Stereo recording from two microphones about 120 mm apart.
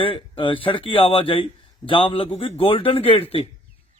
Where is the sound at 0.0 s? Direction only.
45° left (ahead or behind).